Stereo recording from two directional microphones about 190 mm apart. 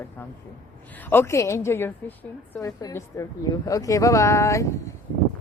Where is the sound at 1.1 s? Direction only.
15° left (ahead or behind).